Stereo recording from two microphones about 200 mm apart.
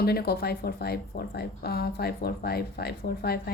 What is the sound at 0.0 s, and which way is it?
A woman's voice, 50° left (ahead or behind).